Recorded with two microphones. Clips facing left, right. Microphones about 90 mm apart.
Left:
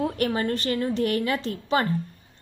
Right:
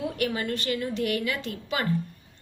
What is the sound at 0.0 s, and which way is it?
Speech, 35° left (ahead or behind).